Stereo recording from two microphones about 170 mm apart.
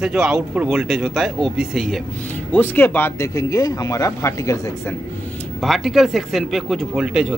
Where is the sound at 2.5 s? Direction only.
10° left (ahead or behind).